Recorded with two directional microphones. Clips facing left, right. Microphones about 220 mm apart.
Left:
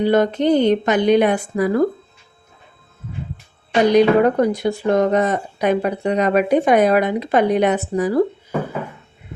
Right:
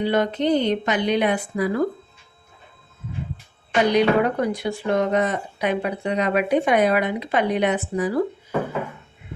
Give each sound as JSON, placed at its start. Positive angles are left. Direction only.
{"t": 0.0, "sound": "speech", "side_deg": 45}
{"t": 3.9, "sound": "speech", "side_deg": 45}